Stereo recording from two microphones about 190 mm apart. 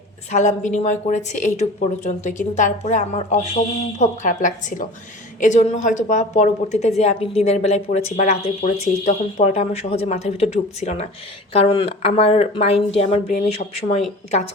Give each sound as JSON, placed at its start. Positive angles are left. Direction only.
{"t": 0.3, "sound": "a woman's voice", "side_deg": 40}